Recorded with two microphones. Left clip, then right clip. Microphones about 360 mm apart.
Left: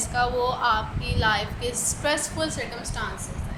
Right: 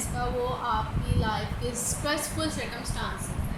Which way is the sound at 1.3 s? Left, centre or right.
Left.